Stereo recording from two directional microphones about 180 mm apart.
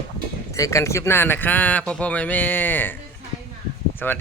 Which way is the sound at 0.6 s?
15° left (ahead or behind).